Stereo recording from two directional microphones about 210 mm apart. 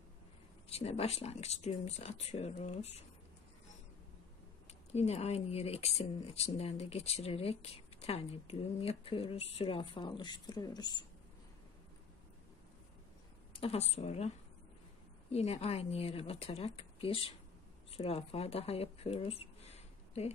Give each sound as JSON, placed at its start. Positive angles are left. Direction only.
{"t": 0.7, "sound": "speech", "side_deg": 30}
{"t": 4.9, "sound": "speech", "side_deg": 30}
{"t": 13.5, "sound": "speech", "side_deg": 25}
{"t": 15.3, "sound": "speech", "side_deg": 30}